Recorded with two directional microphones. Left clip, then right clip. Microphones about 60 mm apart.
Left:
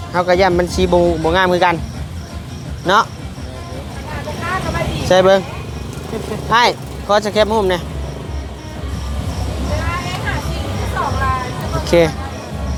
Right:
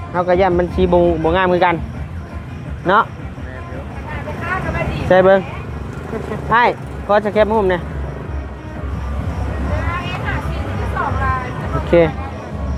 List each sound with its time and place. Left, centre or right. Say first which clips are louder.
0.1 s speech: left 1 dB; left
1.2 s speech: left 1 dB; centre
4.4 s vehicle: left 1 dB; left
5.0 s speech: even; centre
6.5 s speech: left 1 dB; centre
9.6 s vehicle: left 1 dB; left
10.8 s music: left 1 dB; left
11.9 s speech: even; centre